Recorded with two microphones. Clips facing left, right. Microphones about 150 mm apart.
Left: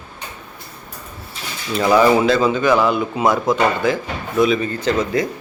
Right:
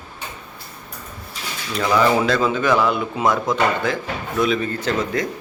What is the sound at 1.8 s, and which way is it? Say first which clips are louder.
Speech: left 4 dB; 20° left (ahead or behind).